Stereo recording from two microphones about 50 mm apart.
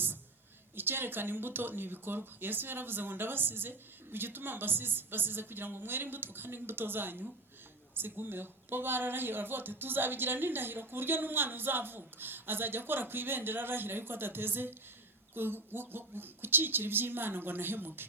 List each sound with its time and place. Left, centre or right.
0.8 s speech: right